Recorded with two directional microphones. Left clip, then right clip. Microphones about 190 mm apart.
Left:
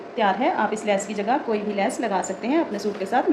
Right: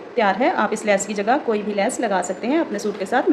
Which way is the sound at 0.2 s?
40° right (ahead or behind).